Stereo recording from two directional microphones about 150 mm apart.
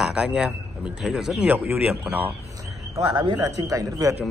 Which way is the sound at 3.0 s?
30° right (ahead or behind).